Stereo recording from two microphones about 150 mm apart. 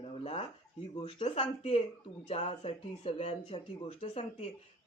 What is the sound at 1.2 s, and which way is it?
Speech, 45° left (ahead or behind).